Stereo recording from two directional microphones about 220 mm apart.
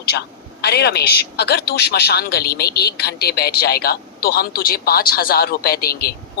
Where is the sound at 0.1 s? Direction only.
50° left (ahead or behind).